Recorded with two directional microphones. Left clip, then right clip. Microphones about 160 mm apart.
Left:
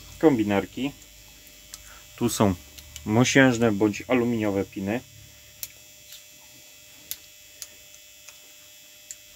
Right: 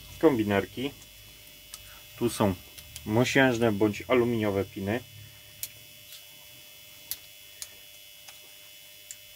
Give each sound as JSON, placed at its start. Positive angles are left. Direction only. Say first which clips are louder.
{"t": 0.2, "sound": "speech", "louder": "left 3 dB", "side_deg": 55}
{"t": 1.7, "sound": "hum", "louder": "left 2 dB", "side_deg": 60}
{"t": 3.1, "sound": "speech", "louder": "left 4 dB", "side_deg": 70}